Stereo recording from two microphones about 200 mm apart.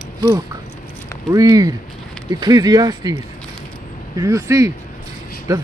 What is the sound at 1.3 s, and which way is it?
Speech, 15° right (ahead or behind).